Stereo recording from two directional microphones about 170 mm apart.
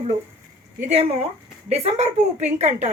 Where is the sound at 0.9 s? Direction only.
35° right (ahead or behind).